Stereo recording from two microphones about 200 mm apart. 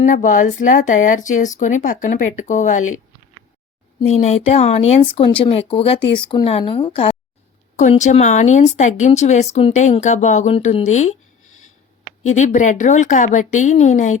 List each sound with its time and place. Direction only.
0.0 s speech: 40° left (ahead or behind)
4.0 s speech: 30° left (ahead or behind)
12.2 s speech: 35° left (ahead or behind)